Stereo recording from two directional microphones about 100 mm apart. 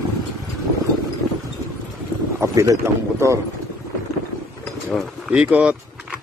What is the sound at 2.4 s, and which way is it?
Speech, 35° right (ahead or behind).